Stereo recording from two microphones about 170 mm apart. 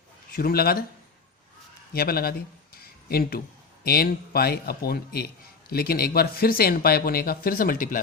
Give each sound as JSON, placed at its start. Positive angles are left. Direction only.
{"t": 0.3, "sound": "a man's voice", "side_deg": 60}
{"t": 1.9, "sound": "a man's voice", "side_deg": 65}
{"t": 2.8, "sound": "a sound", "side_deg": 65}
{"t": 3.8, "sound": "a man's voice", "side_deg": 65}